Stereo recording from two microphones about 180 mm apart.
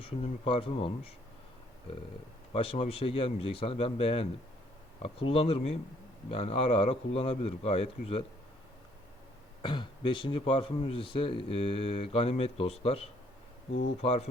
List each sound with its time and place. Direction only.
0.0 s speech: 30° left (ahead or behind)
2.5 s speech: 30° left (ahead or behind)
9.6 s speech: 25° left (ahead or behind)